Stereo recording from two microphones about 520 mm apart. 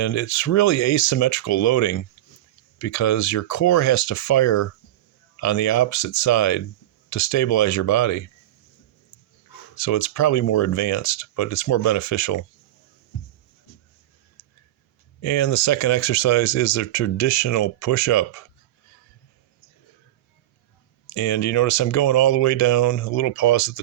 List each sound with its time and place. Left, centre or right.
0.0 s speech: left
9.7 s speech: left
15.2 s speech: left
21.1 s speech: left